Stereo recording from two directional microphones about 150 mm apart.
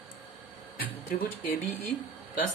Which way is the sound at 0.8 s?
70° left (ahead or behind).